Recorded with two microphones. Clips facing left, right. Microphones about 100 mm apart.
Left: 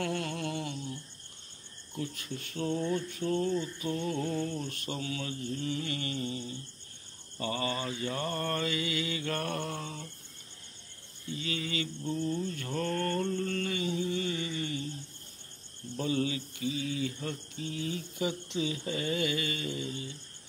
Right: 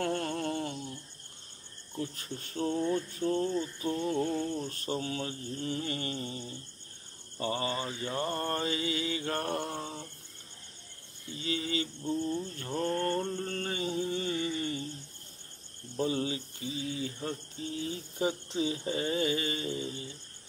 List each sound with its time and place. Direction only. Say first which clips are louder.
0.0 s a sound: right 2 dB; 40° right (ahead or behind)
2.0 s mantra: even; 35° right (ahead or behind)
4.6 s mantra: right 2 dB; 35° right (ahead or behind)
11.3 s mantra: right 2 dB; 30° right (ahead or behind)
12.0 s mantra: left 2 dB; 20° right (ahead or behind); by 14.9 s 35° right (ahead or behind)
16.0 s mantra: even; 30° right (ahead or behind)